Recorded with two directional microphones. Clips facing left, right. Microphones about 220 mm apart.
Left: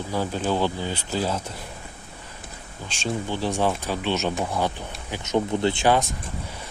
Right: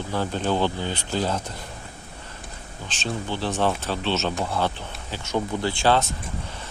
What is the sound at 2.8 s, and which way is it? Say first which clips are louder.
Speech: left 2 dB; 10° left (ahead or behind).